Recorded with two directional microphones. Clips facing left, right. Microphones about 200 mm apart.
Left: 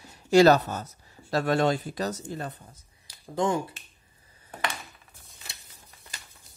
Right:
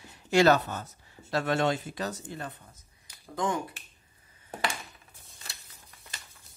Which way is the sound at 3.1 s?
30° left (ahead or behind).